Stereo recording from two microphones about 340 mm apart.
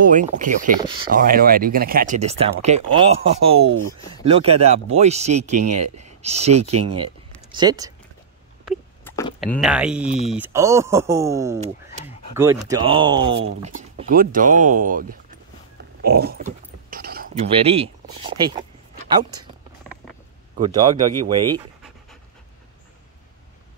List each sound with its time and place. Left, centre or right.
0.1 s speech: right
1.2 s speech: right
5.7 s speech: right
5.9 s speech: centre
6.6 s speech: right
7.5 s speech: centre
8.6 s a sound: centre
10.2 s speech: centre
13.2 s speech: right
15.8 s a sound: right
20.5 s speech: centre